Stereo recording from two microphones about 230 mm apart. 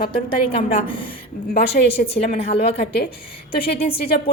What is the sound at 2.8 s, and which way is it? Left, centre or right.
A woman's voice, left.